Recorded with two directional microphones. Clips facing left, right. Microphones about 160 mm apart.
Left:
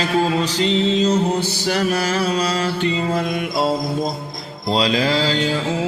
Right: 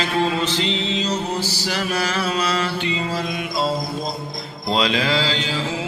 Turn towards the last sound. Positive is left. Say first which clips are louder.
# left 3 dB
turn(degrees=45)  # may be behind; listen again after turning